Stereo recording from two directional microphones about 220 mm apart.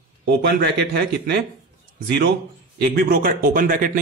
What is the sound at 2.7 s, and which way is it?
Speech, 45° right (ahead or behind).